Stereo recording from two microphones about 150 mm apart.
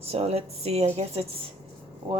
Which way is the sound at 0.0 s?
40° right (ahead or behind).